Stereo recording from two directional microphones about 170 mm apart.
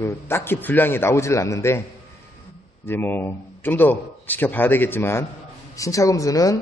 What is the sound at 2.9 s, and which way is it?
A man's voice, 10° left (ahead or behind).